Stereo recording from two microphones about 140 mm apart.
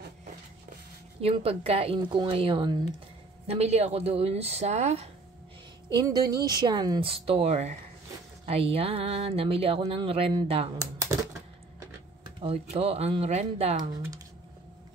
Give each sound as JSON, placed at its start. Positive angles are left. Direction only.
{"t": 1.2, "sound": "speech", "side_deg": -45}
{"t": 3.4, "sound": "speech", "side_deg": -50}
{"t": 5.9, "sound": "speech", "side_deg": -30}
{"t": 12.4, "sound": "speech", "side_deg": -45}